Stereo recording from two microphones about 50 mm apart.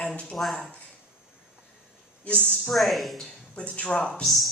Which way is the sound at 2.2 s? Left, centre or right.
Left.